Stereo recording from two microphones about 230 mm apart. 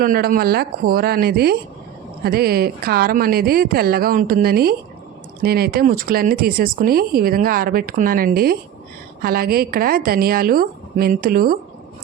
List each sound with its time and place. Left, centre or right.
0.0 s speech: right